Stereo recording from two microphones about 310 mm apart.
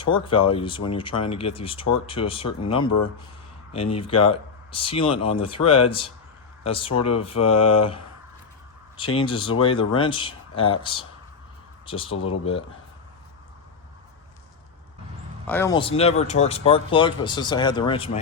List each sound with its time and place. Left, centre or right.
0.0 s speech: centre
7.1 s mantra: centre
9.1 s speech: centre
15.4 s speech: centre